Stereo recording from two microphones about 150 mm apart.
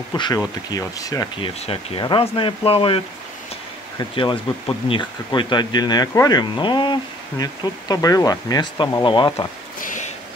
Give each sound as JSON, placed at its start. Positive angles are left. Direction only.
{"t": 0.1, "sound": "speech", "side_deg": 25}
{"t": 1.4, "sound": "speech", "side_deg": 35}
{"t": 4.1, "sound": "speech", "side_deg": 35}
{"t": 9.8, "sound": "a sound", "side_deg": 60}